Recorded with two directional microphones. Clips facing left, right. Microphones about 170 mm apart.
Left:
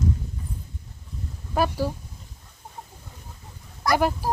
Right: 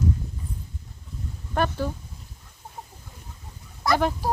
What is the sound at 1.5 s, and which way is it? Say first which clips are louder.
Speech: left 2 dB; 10° left (ahead or behind).